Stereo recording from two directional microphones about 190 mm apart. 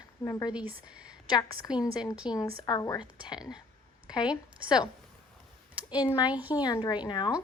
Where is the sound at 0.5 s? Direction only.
10° right (ahead or behind).